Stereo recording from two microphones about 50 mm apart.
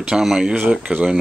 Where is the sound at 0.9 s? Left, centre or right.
Right.